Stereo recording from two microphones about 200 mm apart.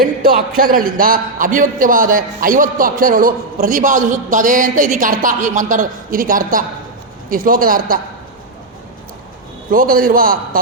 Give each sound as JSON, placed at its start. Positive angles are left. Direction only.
{"t": 0.0, "sound": "a man's voice", "side_deg": -45}
{"t": 9.7, "sound": "a man's voice", "side_deg": -45}